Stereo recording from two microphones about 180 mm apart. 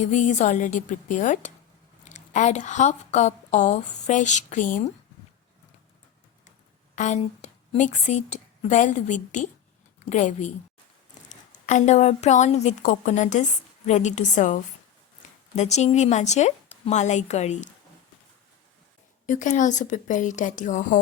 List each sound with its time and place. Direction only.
0.0 s a woman's voice: 40° left (ahead or behind)
6.9 s a woman's voice: 40° left (ahead or behind)
19.2 s a woman's voice: 45° left (ahead or behind)